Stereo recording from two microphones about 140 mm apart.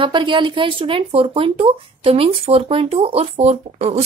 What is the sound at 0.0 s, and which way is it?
Speech, 35° right (ahead or behind).